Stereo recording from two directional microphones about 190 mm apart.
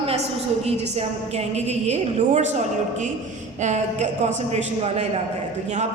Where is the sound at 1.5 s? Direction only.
35° right (ahead or behind).